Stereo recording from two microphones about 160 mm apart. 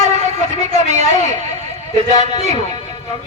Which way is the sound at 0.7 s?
45° right (ahead or behind).